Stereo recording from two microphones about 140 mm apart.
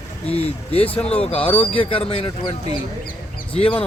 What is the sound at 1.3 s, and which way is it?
Speech, 10° left (ahead or behind).